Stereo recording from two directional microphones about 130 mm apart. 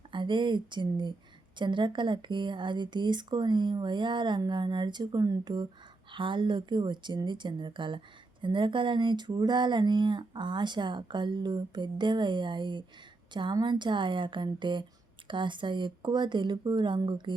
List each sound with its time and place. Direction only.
0.1 s speech: 35° right (ahead or behind)